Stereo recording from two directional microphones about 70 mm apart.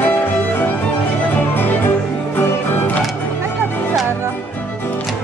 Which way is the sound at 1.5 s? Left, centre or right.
Left.